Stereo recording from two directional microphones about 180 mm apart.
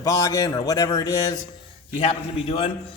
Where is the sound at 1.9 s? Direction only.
30° left (ahead or behind).